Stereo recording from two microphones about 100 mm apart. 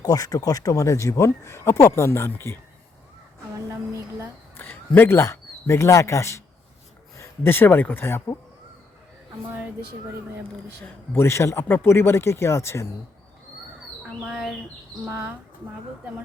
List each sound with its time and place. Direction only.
0.0 s speech: 35° left (ahead or behind)
4.5 s a sound: 20° left (ahead or behind)
4.9 s speech: 25° left (ahead or behind)
11.1 s speech: 25° left (ahead or behind)
14.3 s speech: centre (ahead or behind)
15.0 s speech: 20° right (ahead or behind)